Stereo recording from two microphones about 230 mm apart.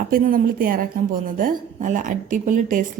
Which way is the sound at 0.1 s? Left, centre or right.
Right.